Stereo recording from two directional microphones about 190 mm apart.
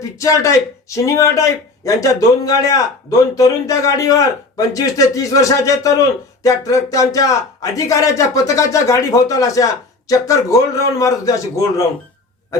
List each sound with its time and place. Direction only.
0.0 s a man's voice: 15° left (ahead or behind)